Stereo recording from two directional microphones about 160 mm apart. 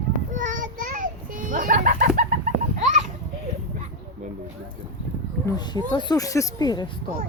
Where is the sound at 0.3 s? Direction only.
55° right (ahead or behind).